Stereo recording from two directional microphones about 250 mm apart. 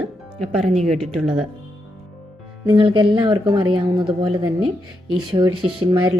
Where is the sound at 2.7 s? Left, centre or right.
Centre.